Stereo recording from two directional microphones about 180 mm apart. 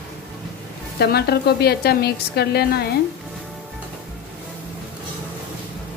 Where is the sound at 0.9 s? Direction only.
60° left (ahead or behind).